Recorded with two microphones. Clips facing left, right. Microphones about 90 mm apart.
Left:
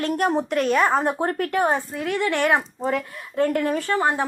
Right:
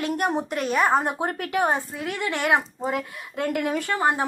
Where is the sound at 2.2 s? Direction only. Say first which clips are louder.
Left 5 dB; 55° left (ahead or behind).